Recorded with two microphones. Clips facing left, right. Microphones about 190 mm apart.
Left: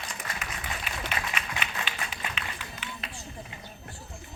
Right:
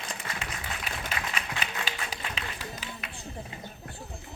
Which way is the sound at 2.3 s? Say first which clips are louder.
Right 2 dB; 35° right (ahead or behind).